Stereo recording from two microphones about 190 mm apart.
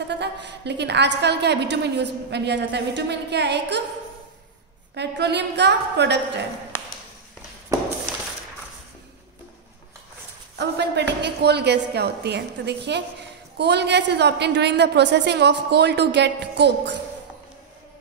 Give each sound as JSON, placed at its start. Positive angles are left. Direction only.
{"t": 0.1, "sound": "a woman's voice", "side_deg": -65}
{"t": 4.9, "sound": "a woman's voice", "side_deg": -65}
{"t": 10.6, "sound": "a woman's voice", "side_deg": -65}